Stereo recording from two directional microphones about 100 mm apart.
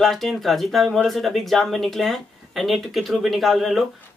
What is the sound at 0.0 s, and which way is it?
Speech, centre (ahead or behind).